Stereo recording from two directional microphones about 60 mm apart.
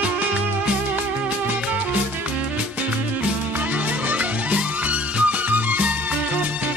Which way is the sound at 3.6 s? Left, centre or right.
Right.